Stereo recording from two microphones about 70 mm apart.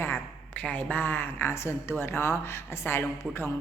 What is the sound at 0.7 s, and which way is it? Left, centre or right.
A woman's voice, left.